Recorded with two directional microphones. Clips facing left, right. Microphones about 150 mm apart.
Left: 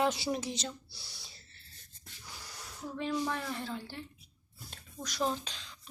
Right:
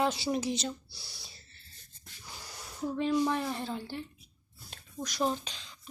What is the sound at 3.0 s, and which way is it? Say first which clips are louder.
Speech: right 5 dB; 25° right (ahead or behind).